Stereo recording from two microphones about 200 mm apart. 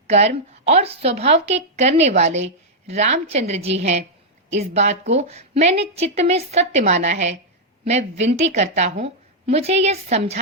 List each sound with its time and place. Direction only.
0.1 s a woman's voice: 35° right (ahead or behind)